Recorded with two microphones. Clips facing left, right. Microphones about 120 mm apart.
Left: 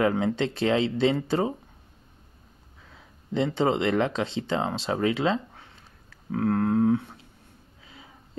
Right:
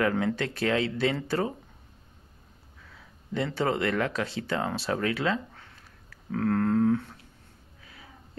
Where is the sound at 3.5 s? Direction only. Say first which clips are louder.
Left 3 dB; 20° left (ahead or behind).